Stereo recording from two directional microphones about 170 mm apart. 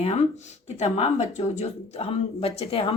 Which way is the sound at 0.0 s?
40° left (ahead or behind).